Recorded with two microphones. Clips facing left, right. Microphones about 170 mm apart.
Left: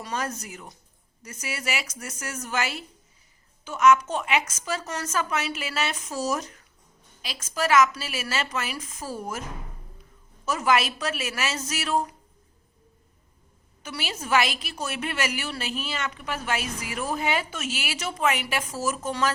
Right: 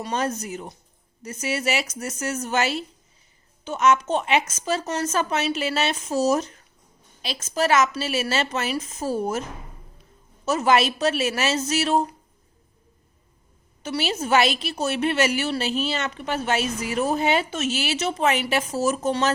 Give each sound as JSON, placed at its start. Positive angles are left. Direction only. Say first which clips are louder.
{"t": 0.0, "sound": "a woman's voice", "louder": "right 5 dB", "side_deg": -25}
{"t": 10.4, "sound": "a woman's voice", "louder": "right 4 dB", "side_deg": -25}
{"t": 13.8, "sound": "a woman's voice", "louder": "right 8 dB", "side_deg": -25}